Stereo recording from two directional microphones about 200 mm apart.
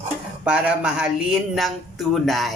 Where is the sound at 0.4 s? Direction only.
5° right (ahead or behind).